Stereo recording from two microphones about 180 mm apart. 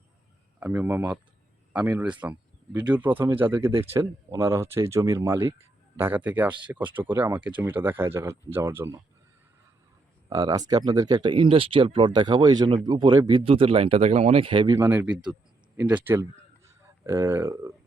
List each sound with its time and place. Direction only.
0.6 s speech: 10° right (ahead or behind)
10.2 s speech: 20° right (ahead or behind)
14.8 s speech: 10° right (ahead or behind)